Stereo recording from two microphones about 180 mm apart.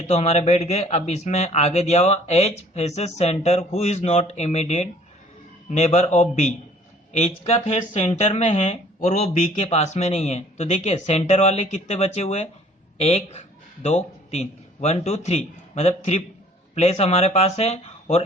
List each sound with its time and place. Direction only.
0.1 s a man's voice: 40° left (ahead or behind)